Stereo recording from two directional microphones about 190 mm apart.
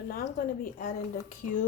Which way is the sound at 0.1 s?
50° left (ahead or behind).